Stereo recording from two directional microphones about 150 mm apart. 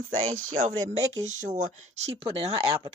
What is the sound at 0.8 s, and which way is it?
Speech, 50° right (ahead or behind).